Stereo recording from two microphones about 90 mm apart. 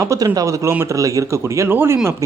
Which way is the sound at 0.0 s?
35° right (ahead or behind).